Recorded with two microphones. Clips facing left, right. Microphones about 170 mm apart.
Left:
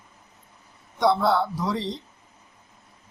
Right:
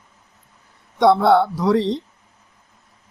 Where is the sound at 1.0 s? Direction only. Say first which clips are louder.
Right 7 dB; 65° right (ahead or behind).